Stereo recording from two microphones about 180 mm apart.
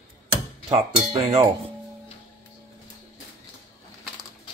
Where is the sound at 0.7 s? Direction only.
30° right (ahead or behind).